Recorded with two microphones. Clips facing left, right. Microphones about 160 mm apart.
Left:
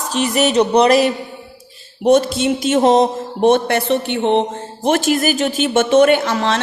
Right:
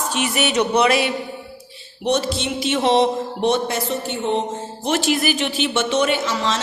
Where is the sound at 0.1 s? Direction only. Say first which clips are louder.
Left 7 dB; 35° left (ahead or behind).